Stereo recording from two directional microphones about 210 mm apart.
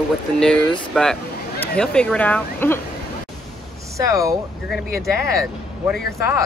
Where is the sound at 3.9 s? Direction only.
15° right (ahead or behind).